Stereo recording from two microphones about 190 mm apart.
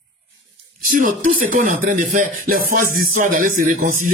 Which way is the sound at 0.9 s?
45° right (ahead or behind).